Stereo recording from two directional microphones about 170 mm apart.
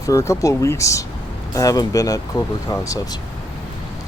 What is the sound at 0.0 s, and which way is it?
Speech, 20° left (ahead or behind).